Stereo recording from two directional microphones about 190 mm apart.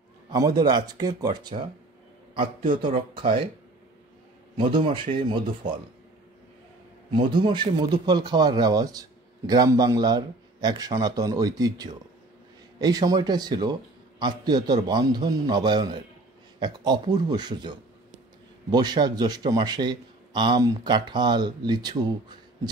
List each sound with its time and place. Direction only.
0.3 s a man's voice: 20° right (ahead or behind)
4.6 s a man's voice: 25° right (ahead or behind)
7.1 s a man's voice: 25° right (ahead or behind)